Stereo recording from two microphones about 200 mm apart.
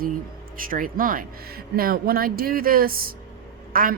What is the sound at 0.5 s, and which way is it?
Speech, 45° right (ahead or behind).